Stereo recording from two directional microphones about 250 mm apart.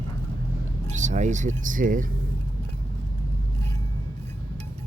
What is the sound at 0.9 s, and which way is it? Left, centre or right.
Speech, right.